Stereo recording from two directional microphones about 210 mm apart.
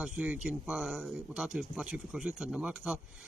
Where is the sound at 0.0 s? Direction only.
5° right (ahead or behind).